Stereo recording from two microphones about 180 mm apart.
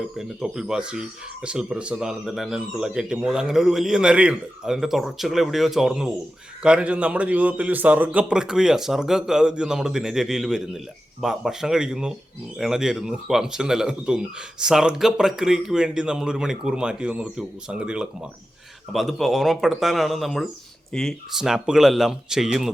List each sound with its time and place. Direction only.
0.2 s speech: centre (ahead or behind)